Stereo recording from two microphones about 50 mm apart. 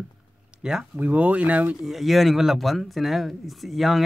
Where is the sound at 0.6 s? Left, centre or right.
Centre.